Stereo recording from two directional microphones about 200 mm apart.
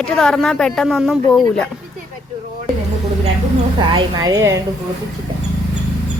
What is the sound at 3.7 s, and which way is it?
Speech, 20° right (ahead or behind).